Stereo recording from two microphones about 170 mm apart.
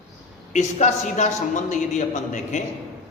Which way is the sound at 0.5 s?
40° left (ahead or behind).